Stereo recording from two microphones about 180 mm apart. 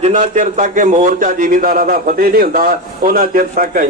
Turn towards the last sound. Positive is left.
turn(degrees=-50)  # may be behind; listen again after turning